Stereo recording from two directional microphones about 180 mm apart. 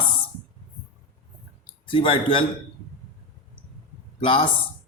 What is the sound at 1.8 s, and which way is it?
Speech, 30° left (ahead or behind).